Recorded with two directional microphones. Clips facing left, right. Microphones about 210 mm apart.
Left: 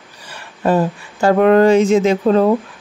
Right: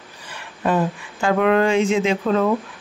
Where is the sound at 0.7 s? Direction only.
40° left (ahead or behind).